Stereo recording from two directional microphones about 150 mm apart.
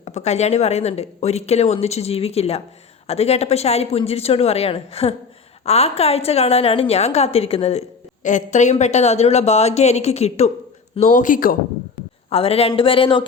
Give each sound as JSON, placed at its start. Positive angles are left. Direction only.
{"t": 0.0, "sound": "a woman's voice", "side_deg": 50}
{"t": 12.3, "sound": "speech", "side_deg": 40}